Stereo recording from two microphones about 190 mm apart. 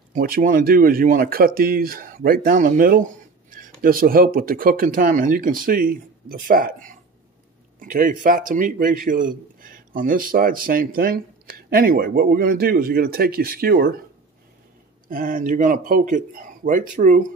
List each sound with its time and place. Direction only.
0.1 s a man's voice: 45° right (ahead or behind)
15.0 s a man's voice: 45° right (ahead or behind)